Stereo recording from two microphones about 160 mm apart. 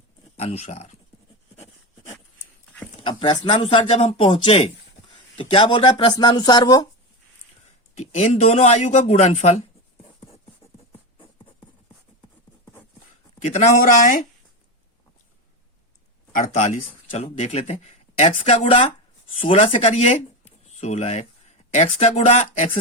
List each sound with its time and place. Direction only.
0.3 s speech: 45° left (ahead or behind)
3.0 s speech: 30° left (ahead or behind)
8.1 s speech: 40° left (ahead or behind)
13.4 s speech: 45° left (ahead or behind)
16.3 s speech: 45° left (ahead or behind)